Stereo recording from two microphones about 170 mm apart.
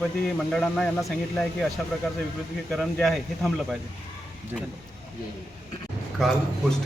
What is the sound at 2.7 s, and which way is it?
Speech, centre (ahead or behind).